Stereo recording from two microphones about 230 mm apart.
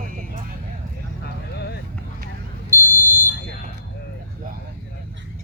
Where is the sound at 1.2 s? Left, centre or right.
Left.